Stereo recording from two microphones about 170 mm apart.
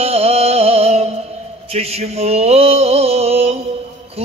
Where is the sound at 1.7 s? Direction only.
35° right (ahead or behind).